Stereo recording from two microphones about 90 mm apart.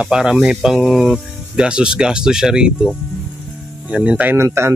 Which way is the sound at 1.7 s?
10° right (ahead or behind).